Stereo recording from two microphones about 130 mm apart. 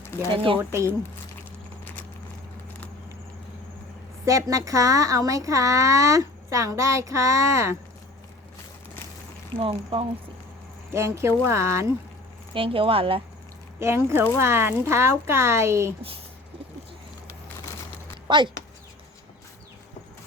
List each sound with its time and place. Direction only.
0.0 s a sound: 20° left (ahead or behind)
0.6 s speech: 20° right (ahead or behind)
4.3 s speech: 25° right (ahead or behind)
9.6 s speech: 45° right (ahead or behind)
10.9 s speech: 20° right (ahead or behind)
12.5 s speech: 45° right (ahead or behind)
13.7 s speech: 20° right (ahead or behind)
18.3 s speech: 35° right (ahead or behind)